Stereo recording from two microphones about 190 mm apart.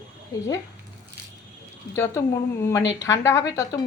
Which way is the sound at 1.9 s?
10° left (ahead or behind).